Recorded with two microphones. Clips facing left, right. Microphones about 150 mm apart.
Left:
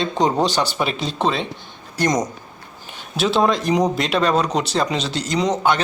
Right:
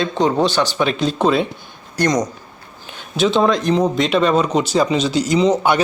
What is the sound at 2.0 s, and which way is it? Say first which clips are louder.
Speech: right 2 dB; 25° left (ahead or behind).